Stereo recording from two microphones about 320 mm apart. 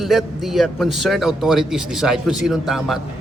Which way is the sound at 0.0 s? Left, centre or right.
Centre.